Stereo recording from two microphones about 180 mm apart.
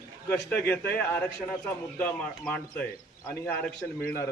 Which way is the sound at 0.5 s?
10° left (ahead or behind).